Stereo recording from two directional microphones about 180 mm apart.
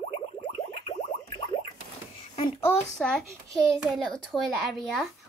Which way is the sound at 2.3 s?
30° left (ahead or behind).